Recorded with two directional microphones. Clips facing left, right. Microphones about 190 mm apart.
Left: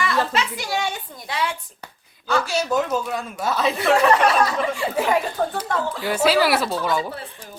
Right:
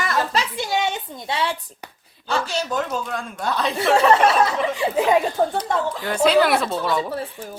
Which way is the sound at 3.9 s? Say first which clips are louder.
Right 1 dB; 30° right (ahead or behind).